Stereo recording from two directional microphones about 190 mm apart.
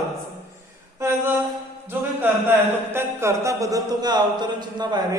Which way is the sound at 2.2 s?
10° right (ahead or behind).